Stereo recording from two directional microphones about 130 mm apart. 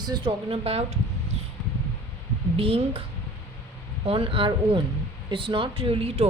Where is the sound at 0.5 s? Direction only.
50° right (ahead or behind).